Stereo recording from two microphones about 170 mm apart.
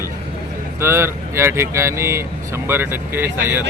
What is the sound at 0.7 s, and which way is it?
Speech, 15° right (ahead or behind).